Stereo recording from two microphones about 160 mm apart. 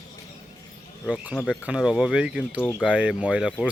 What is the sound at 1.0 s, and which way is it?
Speech, 5° right (ahead or behind).